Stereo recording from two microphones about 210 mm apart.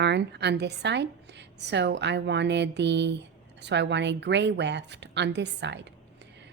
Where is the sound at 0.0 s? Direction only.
55° right (ahead or behind).